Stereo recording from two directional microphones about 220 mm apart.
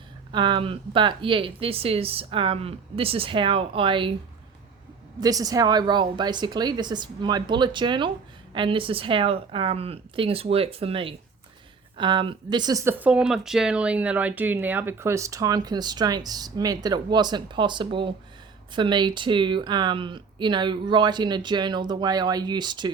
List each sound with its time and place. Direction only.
0.3 s speech: 20° right (ahead or behind)
5.2 s speech: 15° right (ahead or behind)